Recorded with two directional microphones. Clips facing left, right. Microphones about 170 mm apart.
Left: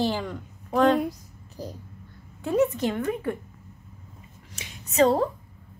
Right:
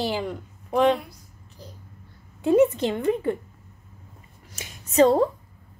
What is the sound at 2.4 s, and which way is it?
A woman's voice, 20° right (ahead or behind).